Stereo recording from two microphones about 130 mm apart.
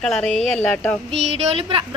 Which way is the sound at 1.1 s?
55° right (ahead or behind).